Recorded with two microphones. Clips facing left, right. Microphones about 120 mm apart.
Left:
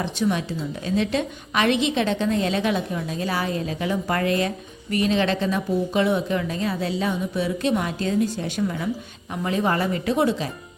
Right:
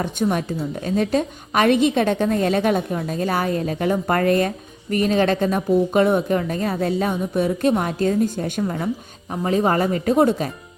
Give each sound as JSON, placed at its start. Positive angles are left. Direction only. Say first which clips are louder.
{"t": 0.0, "sound": "a woman's voice", "louder": "right 2 dB", "side_deg": -50}